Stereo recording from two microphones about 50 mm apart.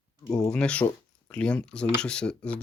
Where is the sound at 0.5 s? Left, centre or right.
Left.